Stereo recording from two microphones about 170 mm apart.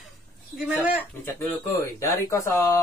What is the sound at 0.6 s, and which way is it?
Speech, 5° right (ahead or behind).